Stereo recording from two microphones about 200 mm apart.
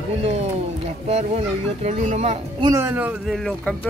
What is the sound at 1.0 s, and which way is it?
Speech, 35° right (ahead or behind).